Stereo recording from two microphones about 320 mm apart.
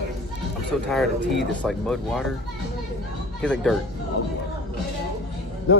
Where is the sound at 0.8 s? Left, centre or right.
Centre.